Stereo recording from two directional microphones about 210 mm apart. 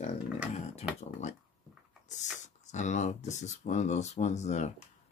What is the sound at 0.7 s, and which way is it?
Speech, 30° left (ahead or behind).